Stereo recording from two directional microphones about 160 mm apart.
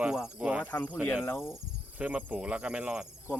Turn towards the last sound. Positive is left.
turn(degrees=-5)  # may be behind; listen again after turning